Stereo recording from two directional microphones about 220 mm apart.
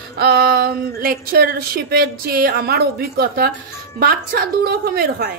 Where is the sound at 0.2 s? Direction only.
45° right (ahead or behind).